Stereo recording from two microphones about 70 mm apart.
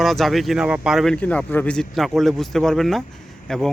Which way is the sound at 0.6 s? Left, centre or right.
Centre.